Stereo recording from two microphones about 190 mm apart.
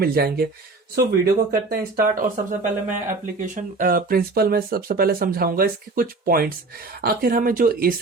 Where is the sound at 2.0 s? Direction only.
45° right (ahead or behind).